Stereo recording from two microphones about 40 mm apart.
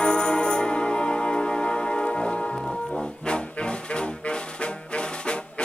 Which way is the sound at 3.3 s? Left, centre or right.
Left.